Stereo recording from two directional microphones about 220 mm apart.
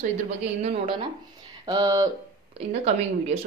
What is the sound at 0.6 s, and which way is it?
Speech, 25° right (ahead or behind).